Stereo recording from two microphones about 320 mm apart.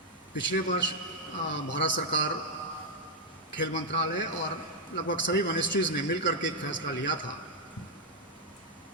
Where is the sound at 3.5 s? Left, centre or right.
Left.